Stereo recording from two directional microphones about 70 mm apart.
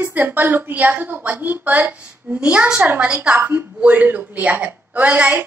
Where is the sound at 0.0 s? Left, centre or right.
Right.